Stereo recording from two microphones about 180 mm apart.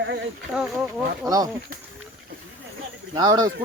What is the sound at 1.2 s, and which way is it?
Speech, 20° right (ahead or behind).